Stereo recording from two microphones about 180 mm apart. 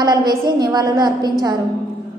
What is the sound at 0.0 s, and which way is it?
A woman's voice, 25° right (ahead or behind).